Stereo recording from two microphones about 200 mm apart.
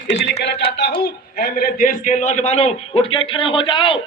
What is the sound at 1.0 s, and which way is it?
A man's voice, 50° left (ahead or behind).